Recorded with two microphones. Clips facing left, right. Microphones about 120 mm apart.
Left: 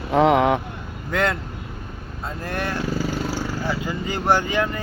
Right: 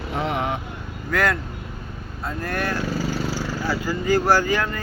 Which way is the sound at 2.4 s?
25° left (ahead or behind).